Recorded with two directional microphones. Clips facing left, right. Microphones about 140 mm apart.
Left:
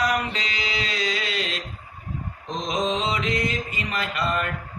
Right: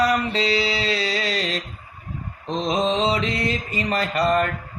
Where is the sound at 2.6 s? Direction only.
30° right (ahead or behind).